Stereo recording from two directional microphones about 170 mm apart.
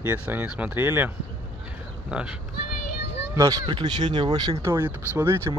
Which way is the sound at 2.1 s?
5° right (ahead or behind).